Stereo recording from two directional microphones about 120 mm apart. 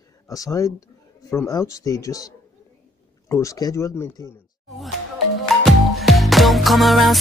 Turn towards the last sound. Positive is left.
turn(degrees=0)  # may be behind; listen again after turning